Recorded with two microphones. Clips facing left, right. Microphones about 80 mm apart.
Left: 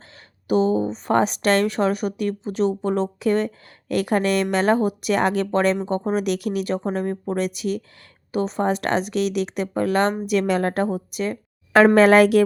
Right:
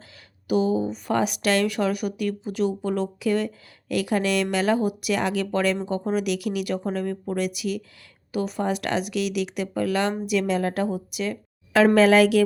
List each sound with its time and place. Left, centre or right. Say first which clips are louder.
0.4 s a woman's voice: left 3 dB; left